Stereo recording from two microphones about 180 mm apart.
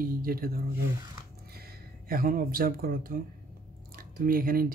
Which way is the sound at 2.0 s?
55° right (ahead or behind).